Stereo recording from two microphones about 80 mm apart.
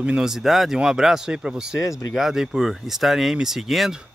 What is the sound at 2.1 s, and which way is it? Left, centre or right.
Speech, centre.